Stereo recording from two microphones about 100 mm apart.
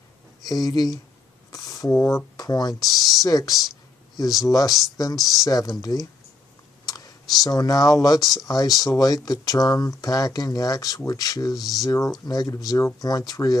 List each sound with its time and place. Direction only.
0.5 s speech: 40° left (ahead or behind)
1.5 s a sound: 35° left (ahead or behind)
2.7 s speech: centre (ahead or behind)
3.3 s speech: 40° left (ahead or behind)
7.4 s speech: 40° left (ahead or behind)